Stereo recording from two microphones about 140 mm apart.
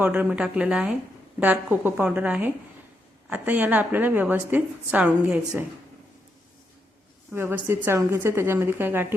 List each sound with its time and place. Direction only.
0.0 s a woman's voice: 10° right (ahead or behind)
7.3 s a woman's voice: 15° right (ahead or behind)